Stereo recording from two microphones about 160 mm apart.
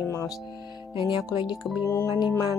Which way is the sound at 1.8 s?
20° left (ahead or behind).